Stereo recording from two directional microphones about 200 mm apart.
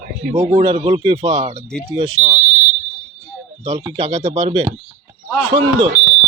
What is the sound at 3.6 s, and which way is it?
Speech, 25° right (ahead or behind).